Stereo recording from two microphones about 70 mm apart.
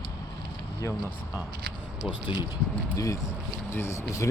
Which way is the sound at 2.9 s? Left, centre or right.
Left.